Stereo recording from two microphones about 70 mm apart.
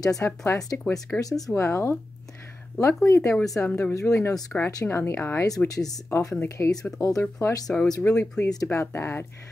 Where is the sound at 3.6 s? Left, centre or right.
Left.